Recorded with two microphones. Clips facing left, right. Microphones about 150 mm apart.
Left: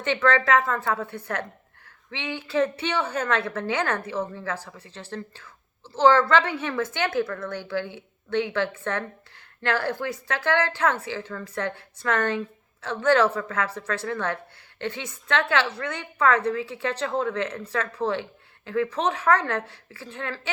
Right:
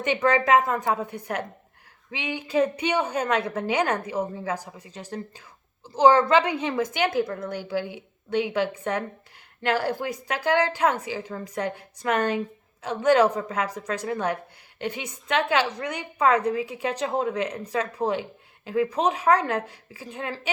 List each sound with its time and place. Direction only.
0.0 s a woman's voice: 15° right (ahead or behind)